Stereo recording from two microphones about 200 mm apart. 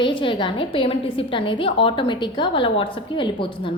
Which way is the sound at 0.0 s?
25° left (ahead or behind).